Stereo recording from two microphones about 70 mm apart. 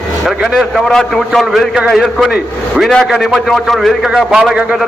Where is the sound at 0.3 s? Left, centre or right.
Centre.